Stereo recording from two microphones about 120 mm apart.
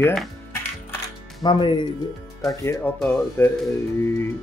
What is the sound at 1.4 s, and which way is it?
Speech, 40° left (ahead or behind).